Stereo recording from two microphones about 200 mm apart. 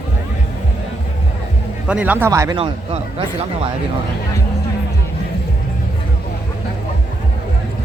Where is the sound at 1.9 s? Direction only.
5° right (ahead or behind); by 3.6 s 30° right (ahead or behind).